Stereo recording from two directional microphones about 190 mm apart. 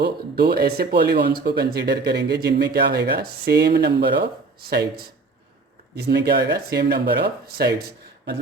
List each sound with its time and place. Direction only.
0.0 s speech: 55° right (ahead or behind)